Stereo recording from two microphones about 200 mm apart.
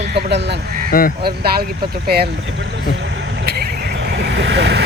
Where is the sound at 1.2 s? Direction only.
50° right (ahead or behind).